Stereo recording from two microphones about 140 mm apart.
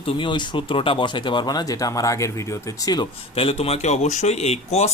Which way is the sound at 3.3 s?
45° left (ahead or behind).